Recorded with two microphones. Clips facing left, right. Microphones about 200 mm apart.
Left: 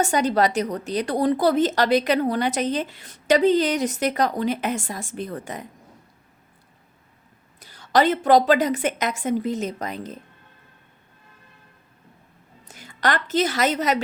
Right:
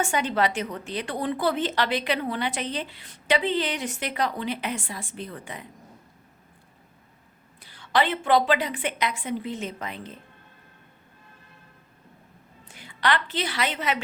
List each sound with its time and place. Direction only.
0.0 s speech: 40° left (ahead or behind)
7.6 s a woman's voice: 40° left (ahead or behind)
12.6 s a woman's voice: 40° left (ahead or behind)